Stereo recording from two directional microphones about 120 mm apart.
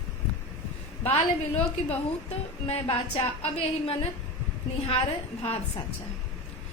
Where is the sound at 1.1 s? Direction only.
60° left (ahead or behind).